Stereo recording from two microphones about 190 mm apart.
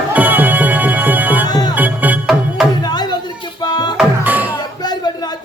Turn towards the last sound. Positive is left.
turn(degrees=20)  # may be behind; listen again after turning